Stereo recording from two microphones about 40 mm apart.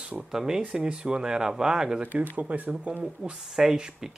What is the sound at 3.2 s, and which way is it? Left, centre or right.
Speech, centre.